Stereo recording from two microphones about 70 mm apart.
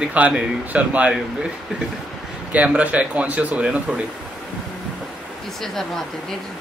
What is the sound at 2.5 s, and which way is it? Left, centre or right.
Speech, right.